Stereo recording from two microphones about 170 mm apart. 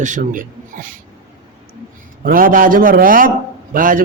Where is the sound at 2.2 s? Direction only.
55° right (ahead or behind).